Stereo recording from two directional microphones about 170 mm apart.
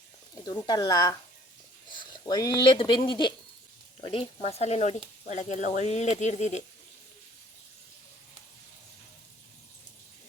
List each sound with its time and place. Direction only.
0.3 s speech: 25° left (ahead or behind); by 6.6 s 40° left (ahead or behind)